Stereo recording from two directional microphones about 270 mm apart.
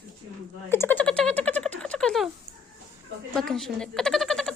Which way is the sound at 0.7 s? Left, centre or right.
Centre.